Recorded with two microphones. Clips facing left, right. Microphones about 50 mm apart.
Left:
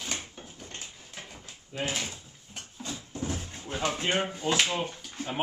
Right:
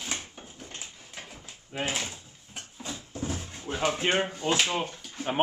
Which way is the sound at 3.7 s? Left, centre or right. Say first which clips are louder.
Right 2 dB; centre.